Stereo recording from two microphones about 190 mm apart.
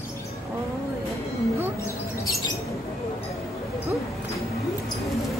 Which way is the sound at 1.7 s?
15° left (ahead or behind).